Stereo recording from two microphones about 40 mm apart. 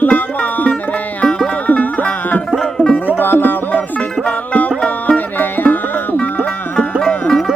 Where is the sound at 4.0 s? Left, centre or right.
Left.